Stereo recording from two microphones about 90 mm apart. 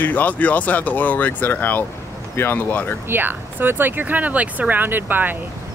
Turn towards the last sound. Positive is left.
turn(degrees=-20)  # may be behind; listen again after turning